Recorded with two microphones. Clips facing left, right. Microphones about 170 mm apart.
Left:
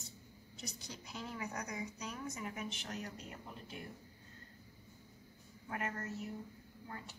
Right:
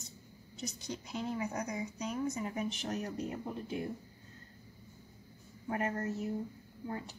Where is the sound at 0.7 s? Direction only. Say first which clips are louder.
Right 8 dB; 20° right (ahead or behind); by 3.1 s 40° right (ahead or behind).